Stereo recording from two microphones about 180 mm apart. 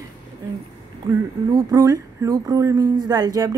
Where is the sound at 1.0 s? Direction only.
20° right (ahead or behind).